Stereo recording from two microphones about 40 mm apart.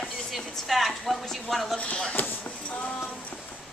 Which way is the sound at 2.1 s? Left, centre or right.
Left.